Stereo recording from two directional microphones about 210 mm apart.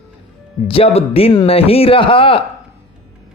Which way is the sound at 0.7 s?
25° left (ahead or behind).